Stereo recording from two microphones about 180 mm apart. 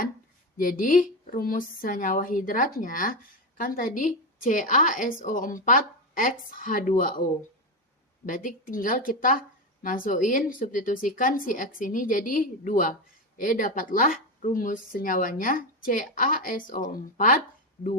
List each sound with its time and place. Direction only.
0.5 s speech: 50° left (ahead or behind)
8.3 s speech: 50° left (ahead or behind)